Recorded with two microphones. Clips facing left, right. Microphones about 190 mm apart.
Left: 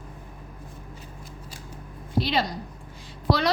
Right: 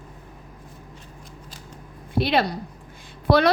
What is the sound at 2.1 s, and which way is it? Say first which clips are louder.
A woman's voice: right 4 dB; 60° right (ahead or behind).